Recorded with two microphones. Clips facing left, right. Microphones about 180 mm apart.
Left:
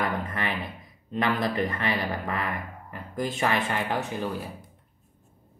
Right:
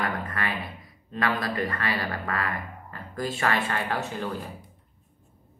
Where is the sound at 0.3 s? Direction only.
20° left (ahead or behind).